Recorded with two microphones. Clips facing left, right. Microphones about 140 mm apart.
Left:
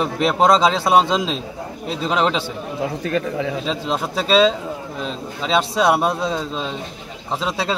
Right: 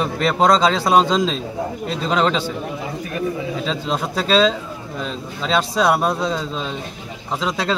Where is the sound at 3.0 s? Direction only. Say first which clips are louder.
Even; 80° left.